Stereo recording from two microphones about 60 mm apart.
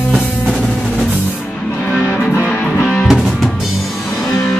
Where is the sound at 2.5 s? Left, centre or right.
Centre.